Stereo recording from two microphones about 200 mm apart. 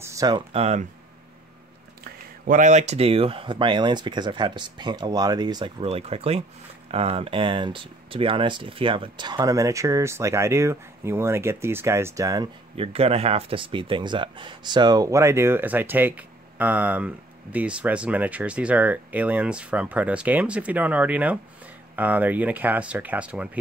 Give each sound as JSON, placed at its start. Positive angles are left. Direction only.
{"t": 0.0, "sound": "a sound", "side_deg": -15}
{"t": 0.5, "sound": "speech", "side_deg": -30}
{"t": 2.0, "sound": "speech", "side_deg": -45}